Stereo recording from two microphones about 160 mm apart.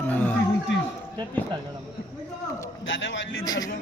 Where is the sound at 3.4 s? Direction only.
25° left (ahead or behind).